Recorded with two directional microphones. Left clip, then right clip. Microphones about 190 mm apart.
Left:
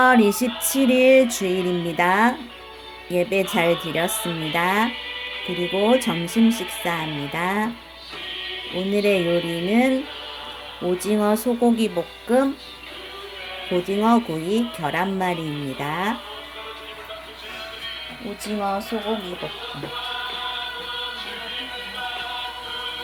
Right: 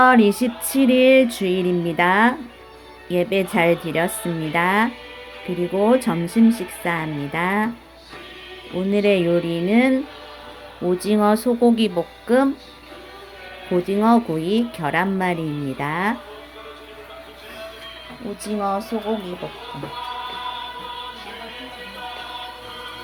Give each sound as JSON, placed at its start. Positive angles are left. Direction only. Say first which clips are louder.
{"t": 0.0, "sound": "music", "louder": "right 2 dB", "side_deg": -5}
{"t": 3.1, "sound": "speech", "louder": "right 1 dB", "side_deg": -5}
{"t": 5.7, "sound": "music", "louder": "right 1 dB", "side_deg": -5}
{"t": 8.7, "sound": "music", "louder": "right 2 dB", "side_deg": -5}
{"t": 11.9, "sound": "speech", "louder": "right 2 dB", "side_deg": -5}
{"t": 13.7, "sound": "music", "louder": "right 2 dB", "side_deg": -5}
{"t": 18.4, "sound": "music", "louder": "right 2 dB", "side_deg": 0}